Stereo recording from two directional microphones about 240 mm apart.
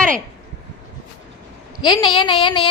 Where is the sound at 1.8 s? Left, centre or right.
Centre.